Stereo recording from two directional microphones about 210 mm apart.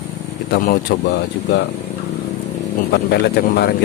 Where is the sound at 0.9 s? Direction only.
45° left (ahead or behind).